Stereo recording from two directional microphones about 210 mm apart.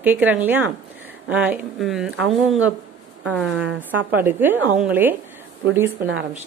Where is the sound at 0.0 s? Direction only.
10° right (ahead or behind).